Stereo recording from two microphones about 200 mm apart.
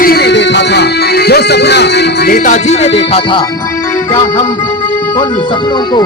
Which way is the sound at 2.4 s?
35° left (ahead or behind).